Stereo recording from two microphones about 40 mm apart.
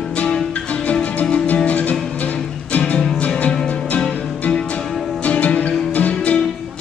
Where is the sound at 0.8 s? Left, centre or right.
Left.